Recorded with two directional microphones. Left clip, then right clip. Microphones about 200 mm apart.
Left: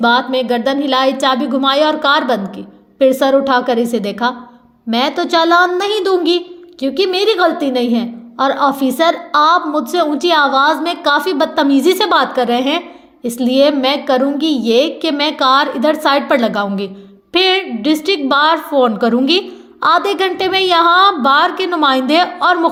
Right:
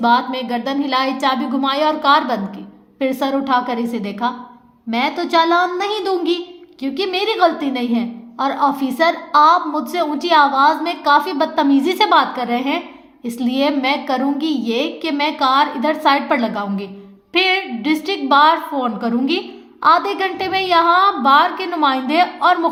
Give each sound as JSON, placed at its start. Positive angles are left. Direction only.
{"t": 0.0, "sound": "a woman's voice", "side_deg": 30}